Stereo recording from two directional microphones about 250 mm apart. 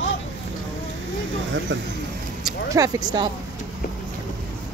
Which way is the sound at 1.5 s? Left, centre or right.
Right.